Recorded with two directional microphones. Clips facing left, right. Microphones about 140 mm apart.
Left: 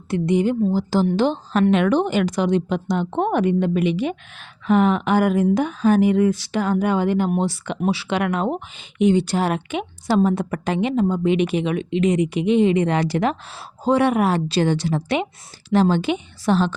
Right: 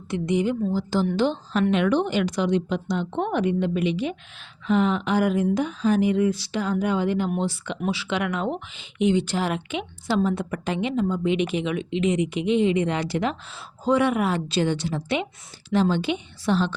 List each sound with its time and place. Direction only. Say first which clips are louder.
0.3 s a woman's voice: left 4 dB; 40° left (ahead or behind)